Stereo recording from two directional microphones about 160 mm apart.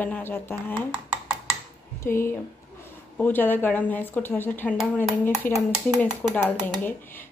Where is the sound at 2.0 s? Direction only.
15° left (ahead or behind).